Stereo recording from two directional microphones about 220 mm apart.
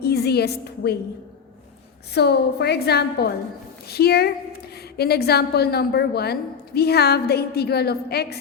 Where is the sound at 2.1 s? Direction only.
50° left (ahead or behind).